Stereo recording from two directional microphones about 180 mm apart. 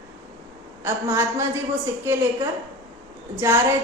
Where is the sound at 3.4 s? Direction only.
15° right (ahead or behind).